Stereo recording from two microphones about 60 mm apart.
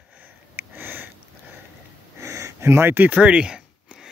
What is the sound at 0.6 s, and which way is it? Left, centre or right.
Sniff, right.